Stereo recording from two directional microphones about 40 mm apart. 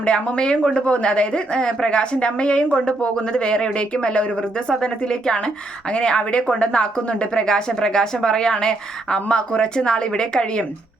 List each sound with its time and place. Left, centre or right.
0.0 s a woman's voice: left
0.9 s a woman's voice: left